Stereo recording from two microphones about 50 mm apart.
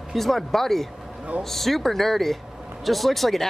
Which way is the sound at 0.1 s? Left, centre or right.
Centre.